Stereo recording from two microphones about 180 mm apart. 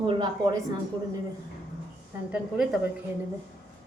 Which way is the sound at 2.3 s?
5° right (ahead or behind).